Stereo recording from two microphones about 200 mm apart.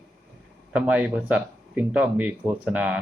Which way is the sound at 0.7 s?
5° right (ahead or behind).